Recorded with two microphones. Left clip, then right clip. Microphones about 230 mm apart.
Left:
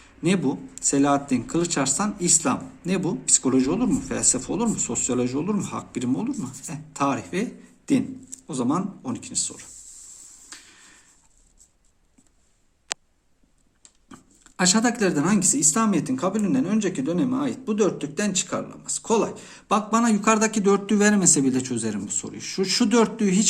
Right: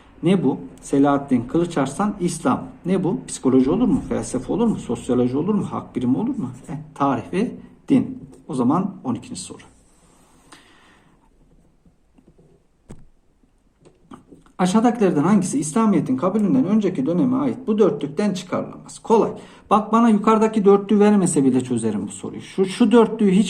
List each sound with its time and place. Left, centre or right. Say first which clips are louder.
0.2 s speech: right 4 dB; left
8.4 s speech: right 5 dB; left
10.5 s a sound: even; left
14.1 s speech: right 5 dB; left